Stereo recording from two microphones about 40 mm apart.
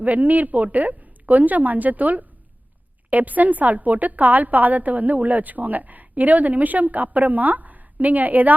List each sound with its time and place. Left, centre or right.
0.0 s a woman's voice: right